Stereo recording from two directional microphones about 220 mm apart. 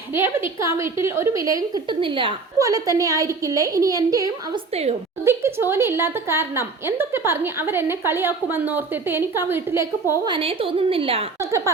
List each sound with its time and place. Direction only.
0.1 s a woman's voice: 10° right (ahead or behind)
4.7 s a woman's voice: 30° right (ahead or behind)
5.2 s a woman's voice: 10° right (ahead or behind)
10.3 s a woman's voice: 25° right (ahead or behind)
11.3 s a woman's voice: 15° right (ahead or behind)